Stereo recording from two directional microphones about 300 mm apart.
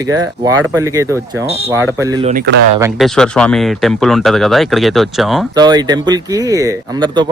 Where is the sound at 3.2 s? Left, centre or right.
Centre.